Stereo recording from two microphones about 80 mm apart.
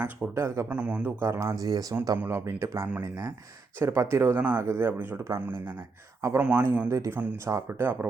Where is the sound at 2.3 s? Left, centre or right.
Right; by 6.6 s centre.